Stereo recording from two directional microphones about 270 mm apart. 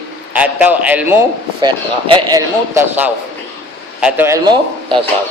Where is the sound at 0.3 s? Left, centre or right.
Centre.